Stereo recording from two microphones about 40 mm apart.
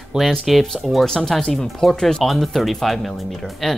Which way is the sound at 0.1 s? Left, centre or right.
Centre.